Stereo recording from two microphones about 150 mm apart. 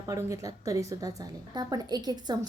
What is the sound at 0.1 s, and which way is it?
Speech, 20° right (ahead or behind).